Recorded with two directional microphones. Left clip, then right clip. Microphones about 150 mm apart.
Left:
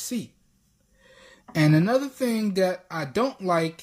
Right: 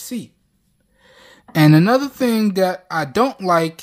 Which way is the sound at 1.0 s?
25° right (ahead or behind).